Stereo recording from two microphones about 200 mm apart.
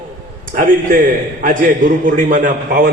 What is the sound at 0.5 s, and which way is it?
Speech, 40° right (ahead or behind).